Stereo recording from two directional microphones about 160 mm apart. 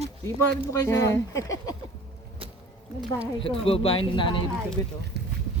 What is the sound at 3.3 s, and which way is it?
Speech, 35° left (ahead or behind).